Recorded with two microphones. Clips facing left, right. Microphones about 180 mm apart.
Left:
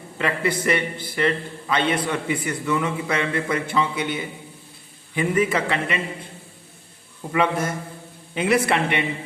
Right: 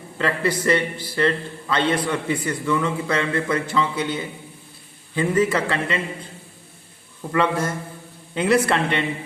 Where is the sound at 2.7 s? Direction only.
15° left (ahead or behind).